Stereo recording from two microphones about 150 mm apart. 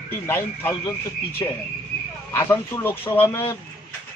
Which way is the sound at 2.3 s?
15° left (ahead or behind).